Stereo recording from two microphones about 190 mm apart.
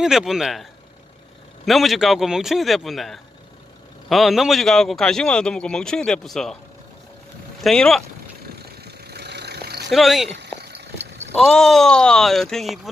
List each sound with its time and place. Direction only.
0.0 s a man's voice: centre (ahead or behind)
1.7 s a man's voice: centre (ahead or behind)
7.6 s a man's voice: centre (ahead or behind)
8.5 s vehicle: 60° right (ahead or behind)
9.8 s a man's voice: centre (ahead or behind)
10.6 s vehicle: 60° right (ahead or behind)
11.3 s a man's voice: centre (ahead or behind)